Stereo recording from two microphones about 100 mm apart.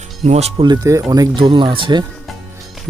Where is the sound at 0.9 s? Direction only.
30° right (ahead or behind).